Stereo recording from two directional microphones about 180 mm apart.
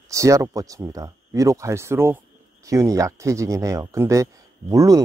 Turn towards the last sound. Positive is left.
turn(degrees=-20)  # may be behind; listen again after turning